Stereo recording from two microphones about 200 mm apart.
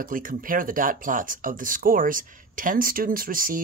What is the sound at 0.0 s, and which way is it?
Speech, 45° right (ahead or behind).